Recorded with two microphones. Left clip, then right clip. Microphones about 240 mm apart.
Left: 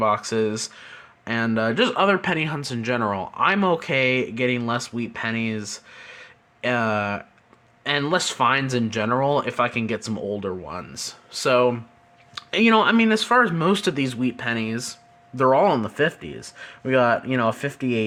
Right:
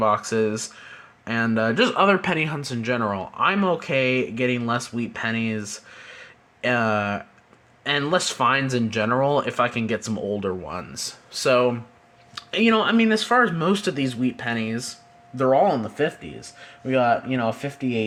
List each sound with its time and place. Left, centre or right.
0.0 s speech: centre; by 18.0 s left